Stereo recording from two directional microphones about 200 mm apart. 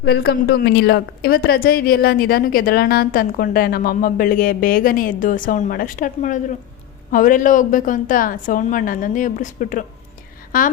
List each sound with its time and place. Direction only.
0.0 s a woman's voice: 55° left (ahead or behind)